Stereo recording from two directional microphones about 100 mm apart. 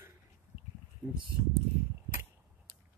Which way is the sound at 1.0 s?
10° right (ahead or behind).